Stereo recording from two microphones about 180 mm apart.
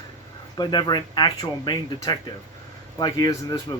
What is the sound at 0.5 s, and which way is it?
Speech, 25° left (ahead or behind).